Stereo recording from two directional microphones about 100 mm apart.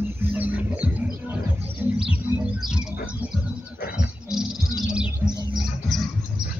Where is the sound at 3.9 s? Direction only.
5° right (ahead or behind).